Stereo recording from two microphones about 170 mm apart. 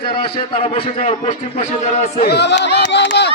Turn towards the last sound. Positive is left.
turn(degrees=85)